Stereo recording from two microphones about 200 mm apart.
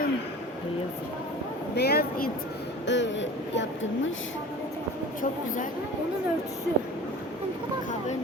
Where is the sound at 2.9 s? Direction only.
65° left (ahead or behind).